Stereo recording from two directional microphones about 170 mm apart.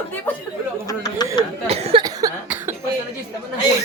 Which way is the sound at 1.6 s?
35° right (ahead or behind).